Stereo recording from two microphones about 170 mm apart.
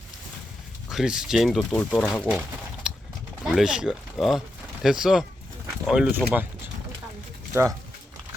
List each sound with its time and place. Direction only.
0.9 s speech: 5° right (ahead or behind)
2.8 s a sound: 5° right (ahead or behind)
3.4 s speech: 5° right (ahead or behind)
7.5 s speech: 15° right (ahead or behind)